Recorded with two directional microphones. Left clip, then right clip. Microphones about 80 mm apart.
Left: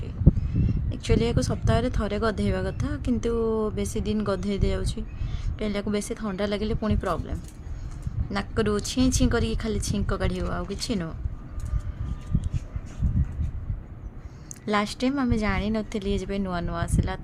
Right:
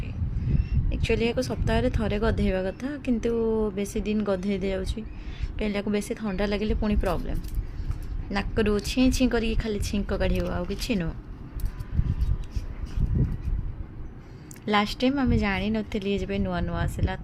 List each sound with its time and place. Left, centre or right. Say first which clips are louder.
0.9 s speech: right 1 dB; centre
14.6 s speech: right 2 dB; centre